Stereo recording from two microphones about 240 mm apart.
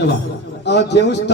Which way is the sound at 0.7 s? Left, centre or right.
Left.